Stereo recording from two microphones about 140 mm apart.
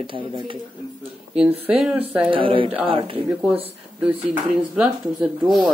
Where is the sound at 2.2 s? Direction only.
40° right (ahead or behind).